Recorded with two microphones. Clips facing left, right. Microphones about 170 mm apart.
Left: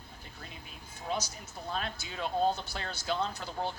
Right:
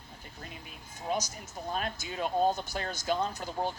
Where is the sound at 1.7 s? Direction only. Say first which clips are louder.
Right 2 dB; 45° right (ahead or behind).